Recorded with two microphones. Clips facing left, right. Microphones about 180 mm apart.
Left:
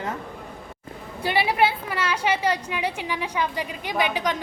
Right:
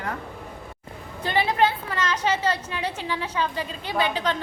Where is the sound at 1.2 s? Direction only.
10° left (ahead or behind).